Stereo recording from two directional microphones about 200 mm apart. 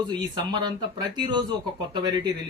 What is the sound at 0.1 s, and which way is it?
Speech, 20° right (ahead or behind).